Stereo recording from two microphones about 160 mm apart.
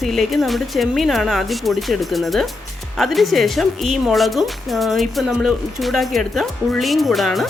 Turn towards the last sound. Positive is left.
turn(degrees=0)  # may be behind; listen again after turning